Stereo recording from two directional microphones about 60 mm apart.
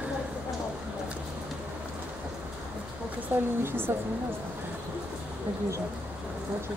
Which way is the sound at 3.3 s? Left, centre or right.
Right.